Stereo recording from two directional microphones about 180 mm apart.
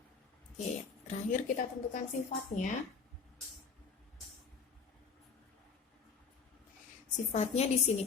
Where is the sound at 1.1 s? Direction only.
45° left (ahead or behind).